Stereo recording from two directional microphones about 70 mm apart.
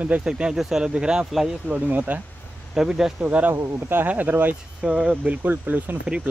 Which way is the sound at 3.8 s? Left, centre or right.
Right.